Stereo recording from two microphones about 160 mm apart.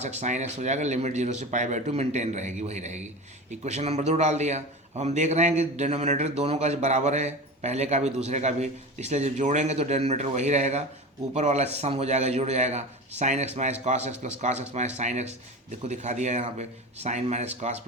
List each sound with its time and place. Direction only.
0.0 s a man's voice: 45° right (ahead or behind)